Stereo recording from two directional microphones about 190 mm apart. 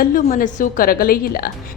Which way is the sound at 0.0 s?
50° left (ahead or behind).